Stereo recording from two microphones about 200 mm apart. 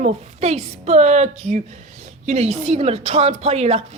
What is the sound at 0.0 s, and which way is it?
A woman's voice, 35° right (ahead or behind).